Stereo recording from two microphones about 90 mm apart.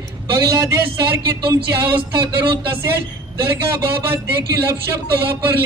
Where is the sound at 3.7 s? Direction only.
30° right (ahead or behind).